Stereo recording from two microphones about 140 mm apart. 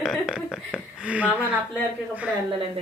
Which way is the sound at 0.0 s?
Centre (ahead or behind).